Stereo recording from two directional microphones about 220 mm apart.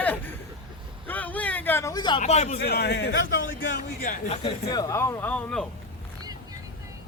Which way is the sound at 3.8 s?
35° left (ahead or behind).